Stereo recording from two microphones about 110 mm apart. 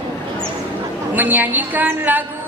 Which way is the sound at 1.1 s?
15° right (ahead or behind).